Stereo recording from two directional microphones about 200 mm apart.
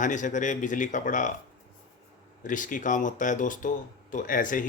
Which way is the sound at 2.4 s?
40° left (ahead or behind).